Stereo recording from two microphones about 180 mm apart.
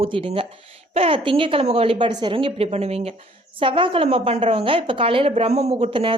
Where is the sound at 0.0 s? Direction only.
30° right (ahead or behind).